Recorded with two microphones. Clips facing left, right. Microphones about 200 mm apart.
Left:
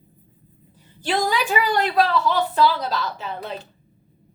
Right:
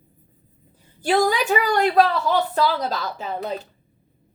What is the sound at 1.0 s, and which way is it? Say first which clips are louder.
A woman's voice: right 3 dB; 45° right (ahead or behind).